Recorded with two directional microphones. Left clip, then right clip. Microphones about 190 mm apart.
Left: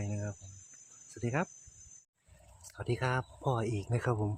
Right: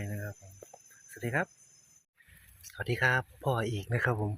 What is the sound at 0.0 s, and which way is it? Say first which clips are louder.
Cricket: even; 10° left (ahead or behind).